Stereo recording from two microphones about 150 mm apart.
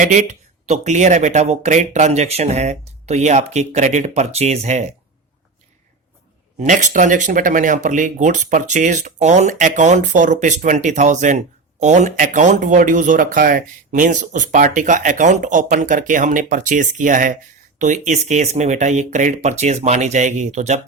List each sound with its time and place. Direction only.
0.0 s speech: 55° right (ahead or behind)
6.6 s speech: 55° right (ahead or behind)